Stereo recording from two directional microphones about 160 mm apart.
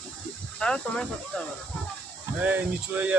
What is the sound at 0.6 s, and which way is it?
Speech, 5° left (ahead or behind).